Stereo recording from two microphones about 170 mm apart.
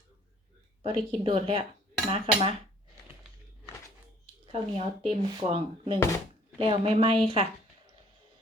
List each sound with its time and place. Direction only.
0.8 s speech: 30° right (ahead or behind)
4.5 s speech: 30° right (ahead or behind)